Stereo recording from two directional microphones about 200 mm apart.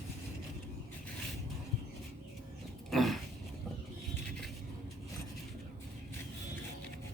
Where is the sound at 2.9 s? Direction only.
Centre (ahead or behind).